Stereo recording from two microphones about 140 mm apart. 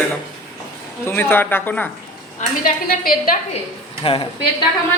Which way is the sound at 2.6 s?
90° left.